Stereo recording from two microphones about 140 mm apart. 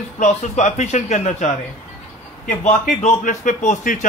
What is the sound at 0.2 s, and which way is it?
Speech, 55° left (ahead or behind).